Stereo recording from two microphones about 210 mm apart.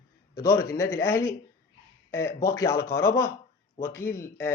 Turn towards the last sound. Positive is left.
turn(degrees=10)  # may be behind; listen again after turning